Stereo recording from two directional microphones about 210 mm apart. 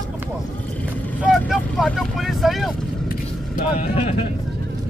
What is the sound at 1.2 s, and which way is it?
Vehicle, centre (ahead or behind).